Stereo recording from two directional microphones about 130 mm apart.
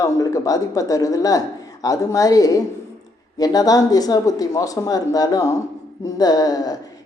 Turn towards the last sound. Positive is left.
turn(degrees=30)  # may be behind; listen again after turning